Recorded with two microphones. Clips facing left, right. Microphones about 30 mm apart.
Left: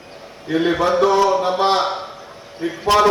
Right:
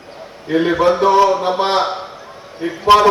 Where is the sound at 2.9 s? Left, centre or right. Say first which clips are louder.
Right 5 dB; right.